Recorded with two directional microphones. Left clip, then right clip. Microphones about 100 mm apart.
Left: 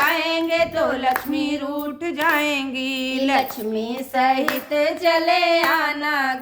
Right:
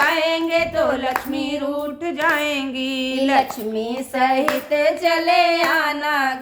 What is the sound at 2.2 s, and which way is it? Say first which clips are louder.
Child singing: even; 40° left (ahead or behind).